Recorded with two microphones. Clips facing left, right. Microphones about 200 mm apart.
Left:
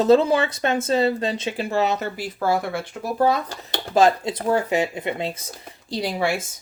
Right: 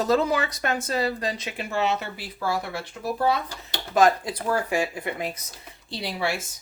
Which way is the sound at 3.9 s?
25° left (ahead or behind).